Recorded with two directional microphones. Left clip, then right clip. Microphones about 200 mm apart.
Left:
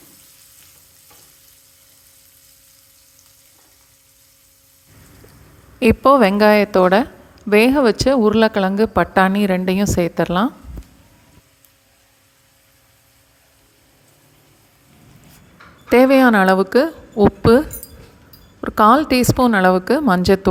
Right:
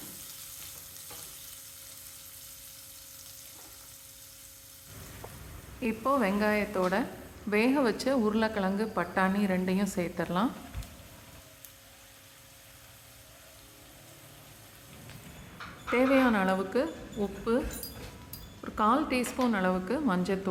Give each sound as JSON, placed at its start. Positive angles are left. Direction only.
{"t": 5.8, "sound": "speech", "side_deg": 45}
{"t": 15.9, "sound": "a woman's voice", "side_deg": 45}
{"t": 18.6, "sound": "a woman's voice", "side_deg": 45}